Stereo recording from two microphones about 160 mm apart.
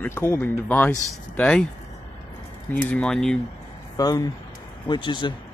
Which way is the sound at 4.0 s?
25° left (ahead or behind).